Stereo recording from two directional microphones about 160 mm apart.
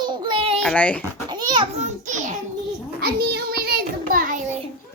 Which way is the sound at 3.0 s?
75° right (ahead or behind).